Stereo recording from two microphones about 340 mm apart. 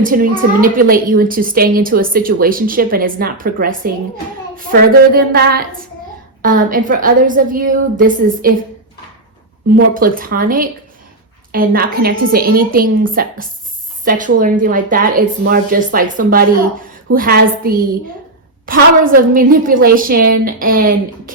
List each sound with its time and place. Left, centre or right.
0.0 s a woman's voice: right
9.6 s a woman's voice: right